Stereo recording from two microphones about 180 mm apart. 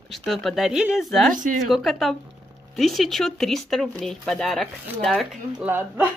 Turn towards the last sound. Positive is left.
turn(degrees=-10)  # may be behind; listen again after turning